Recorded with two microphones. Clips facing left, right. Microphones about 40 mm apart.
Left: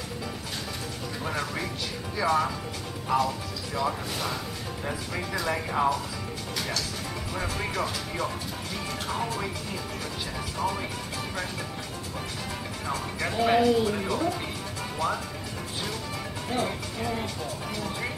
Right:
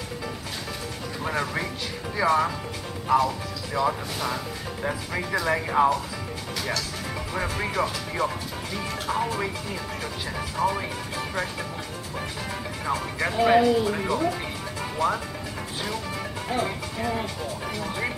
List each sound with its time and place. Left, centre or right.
1.2 s speech: centre
3.1 s speech: centre
7.4 s speech: centre
10.6 s speech: centre
12.8 s speech: centre
16.4 s speech: centre